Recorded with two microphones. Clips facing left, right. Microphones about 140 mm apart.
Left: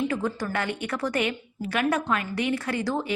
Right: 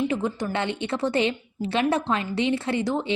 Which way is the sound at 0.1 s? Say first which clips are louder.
Right 2 dB; 20° right (ahead or behind).